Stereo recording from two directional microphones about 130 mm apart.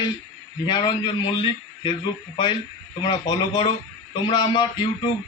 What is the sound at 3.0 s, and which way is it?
A man's voice, 35° left (ahead or behind).